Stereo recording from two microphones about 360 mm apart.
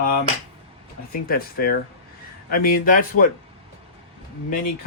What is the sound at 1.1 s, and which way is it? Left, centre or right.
Speech, left.